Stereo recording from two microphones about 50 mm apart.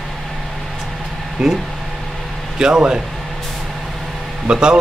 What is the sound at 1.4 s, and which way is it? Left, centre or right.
Speech, centre.